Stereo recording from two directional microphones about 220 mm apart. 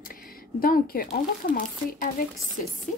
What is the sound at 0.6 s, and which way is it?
Speech, 40° left (ahead or behind).